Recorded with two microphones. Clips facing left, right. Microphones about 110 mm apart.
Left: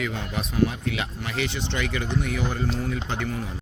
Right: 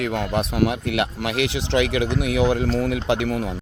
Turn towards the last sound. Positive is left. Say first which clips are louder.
# right 8 dB
turn(degrees=-85)